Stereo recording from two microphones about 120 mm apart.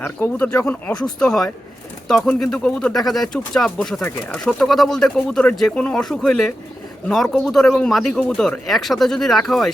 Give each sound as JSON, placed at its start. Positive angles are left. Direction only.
{"t": 0.0, "sound": "speech", "side_deg": 15}